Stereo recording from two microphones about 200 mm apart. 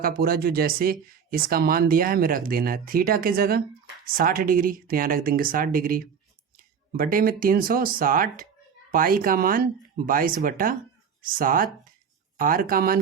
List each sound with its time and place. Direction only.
0.0 s speech: 45° right (ahead or behind)